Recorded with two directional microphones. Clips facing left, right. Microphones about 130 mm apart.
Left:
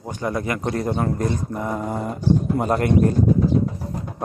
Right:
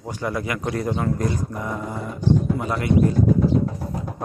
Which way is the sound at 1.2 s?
30° left (ahead or behind).